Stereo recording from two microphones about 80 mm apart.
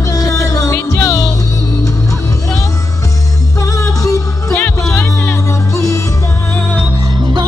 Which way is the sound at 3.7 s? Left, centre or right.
Left.